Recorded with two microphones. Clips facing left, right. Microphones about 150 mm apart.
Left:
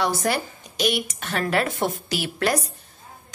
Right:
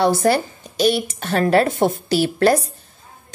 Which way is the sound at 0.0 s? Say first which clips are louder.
Right 7 dB; 35° right (ahead or behind).